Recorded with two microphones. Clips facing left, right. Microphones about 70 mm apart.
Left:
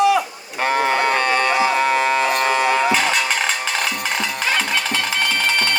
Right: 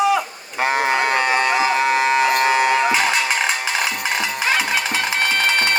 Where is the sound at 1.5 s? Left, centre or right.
Centre.